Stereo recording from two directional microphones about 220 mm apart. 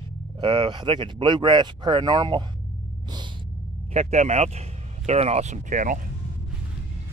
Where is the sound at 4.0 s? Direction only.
30° right (ahead or behind).